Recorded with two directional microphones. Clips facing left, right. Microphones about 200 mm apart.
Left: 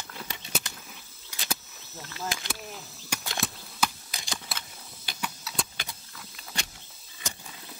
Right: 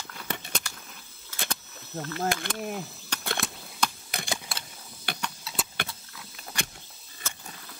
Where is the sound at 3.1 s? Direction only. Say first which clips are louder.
Right 1 dB; 10° left (ahead or behind).